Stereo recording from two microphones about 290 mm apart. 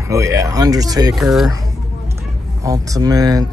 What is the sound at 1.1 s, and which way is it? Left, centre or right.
Speech, centre.